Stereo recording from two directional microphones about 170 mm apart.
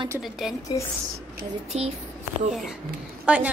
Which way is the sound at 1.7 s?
40° right (ahead or behind).